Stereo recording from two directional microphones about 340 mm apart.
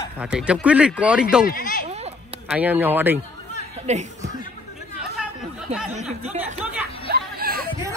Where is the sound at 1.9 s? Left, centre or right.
Centre.